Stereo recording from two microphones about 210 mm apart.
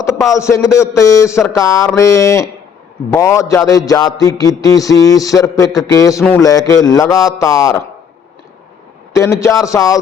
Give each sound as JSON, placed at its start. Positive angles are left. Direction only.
{"t": 0.2, "sound": "music", "side_deg": 15}
{"t": 9.1, "sound": "music", "side_deg": 15}